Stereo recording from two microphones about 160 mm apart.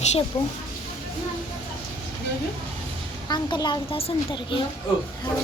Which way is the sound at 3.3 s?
25° left (ahead or behind).